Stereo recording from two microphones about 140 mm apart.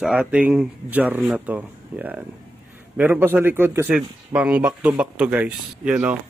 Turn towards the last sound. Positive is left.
turn(degrees=-10)  # may be behind; listen again after turning